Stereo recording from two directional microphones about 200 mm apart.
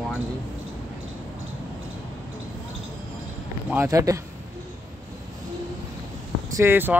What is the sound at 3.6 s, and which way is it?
Speech, 10° right (ahead or behind).